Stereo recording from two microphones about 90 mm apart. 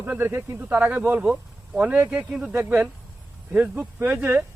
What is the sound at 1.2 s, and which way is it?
A man's voice, 10° right (ahead or behind).